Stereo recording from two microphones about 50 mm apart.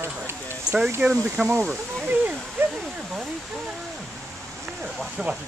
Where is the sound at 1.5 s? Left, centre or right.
Right.